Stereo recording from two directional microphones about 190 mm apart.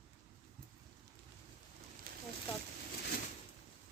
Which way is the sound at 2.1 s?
55° right (ahead or behind).